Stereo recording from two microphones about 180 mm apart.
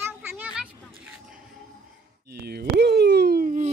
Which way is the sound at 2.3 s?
60° right (ahead or behind).